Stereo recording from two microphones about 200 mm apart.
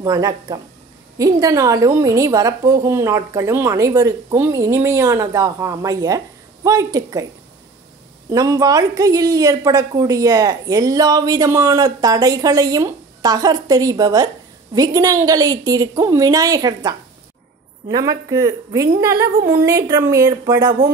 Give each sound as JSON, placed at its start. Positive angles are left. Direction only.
{"t": 0.0, "sound": "a woman's voice", "side_deg": -15}
{"t": 8.3, "sound": "a woman's voice", "side_deg": -15}